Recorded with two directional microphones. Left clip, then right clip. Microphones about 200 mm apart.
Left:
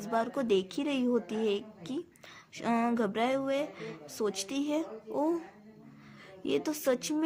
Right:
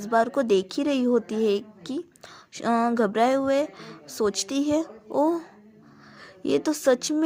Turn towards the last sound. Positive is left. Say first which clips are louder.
# right 8 dB
turn(degrees=-25)  # may be behind; listen again after turning